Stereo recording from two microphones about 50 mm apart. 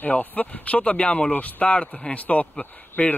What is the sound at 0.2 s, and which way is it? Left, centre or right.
Speech, left.